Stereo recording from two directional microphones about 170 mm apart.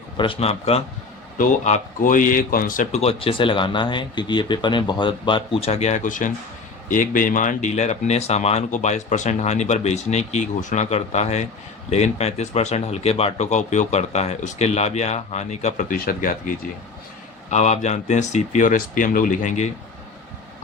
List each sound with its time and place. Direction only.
0.2 s speech: 35° left (ahead or behind)
1.4 s speech: 50° left (ahead or behind)
3.0 s speech: 35° left (ahead or behind); by 16.6 s 55° left (ahead or behind)
17.5 s speech: 40° left (ahead or behind)